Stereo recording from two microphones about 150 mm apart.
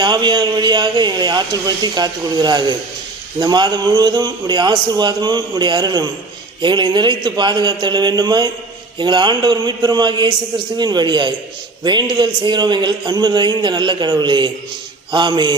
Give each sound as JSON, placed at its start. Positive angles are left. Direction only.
{"t": 0.0, "sound": "a man's voice", "side_deg": -30}